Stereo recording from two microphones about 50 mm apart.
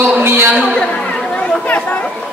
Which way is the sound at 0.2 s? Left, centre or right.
Right.